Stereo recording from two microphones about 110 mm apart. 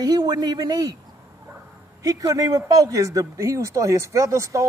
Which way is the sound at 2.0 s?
30° right (ahead or behind).